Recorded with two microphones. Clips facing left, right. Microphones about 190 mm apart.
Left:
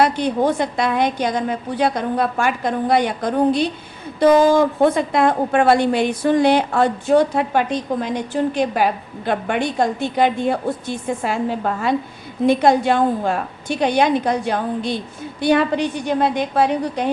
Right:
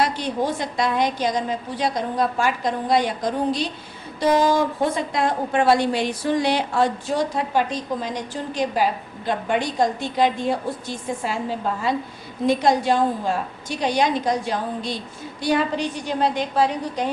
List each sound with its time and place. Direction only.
0.0 s a woman's voice: 55° left (ahead or behind)